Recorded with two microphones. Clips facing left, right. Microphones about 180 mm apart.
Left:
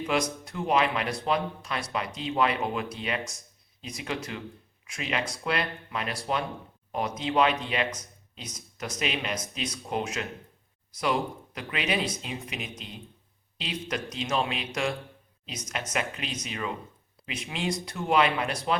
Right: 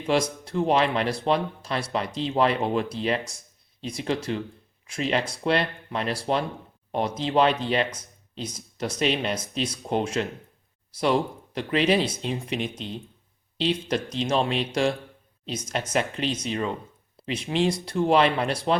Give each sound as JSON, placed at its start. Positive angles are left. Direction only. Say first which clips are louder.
{"t": 0.1, "sound": "speech", "louder": "right 6 dB", "side_deg": -30}
{"t": 13.6, "sound": "speech", "louder": "right 8 dB", "side_deg": -30}